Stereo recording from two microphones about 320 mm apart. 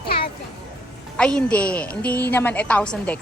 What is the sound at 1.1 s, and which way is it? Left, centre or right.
Speech, centre.